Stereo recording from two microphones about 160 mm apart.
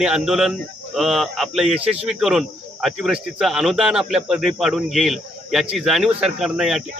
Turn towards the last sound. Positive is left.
turn(degrees=-5)  # may be behind; listen again after turning